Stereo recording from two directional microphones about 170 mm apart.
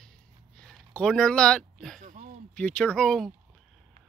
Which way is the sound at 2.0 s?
45° right (ahead or behind).